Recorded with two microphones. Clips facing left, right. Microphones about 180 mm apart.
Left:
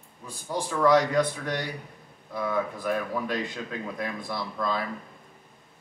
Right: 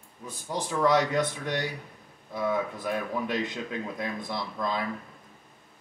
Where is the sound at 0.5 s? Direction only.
20° right (ahead or behind).